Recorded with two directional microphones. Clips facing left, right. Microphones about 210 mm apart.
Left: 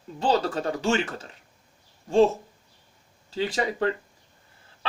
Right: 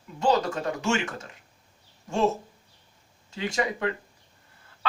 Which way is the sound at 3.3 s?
35° left (ahead or behind).